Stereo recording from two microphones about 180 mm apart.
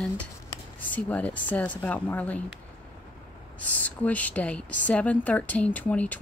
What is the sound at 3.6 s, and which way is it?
A woman's voice, 10° left (ahead or behind).